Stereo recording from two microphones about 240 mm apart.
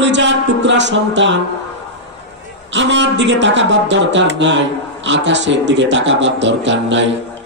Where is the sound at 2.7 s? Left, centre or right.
Right.